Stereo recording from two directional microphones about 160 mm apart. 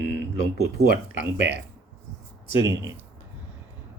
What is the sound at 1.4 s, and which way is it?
Speech, 90° right.